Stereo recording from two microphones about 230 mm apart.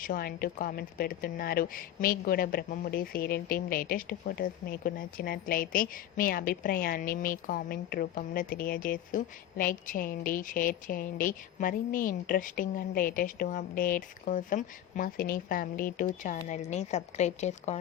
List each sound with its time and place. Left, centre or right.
0.0 s a woman's voice: left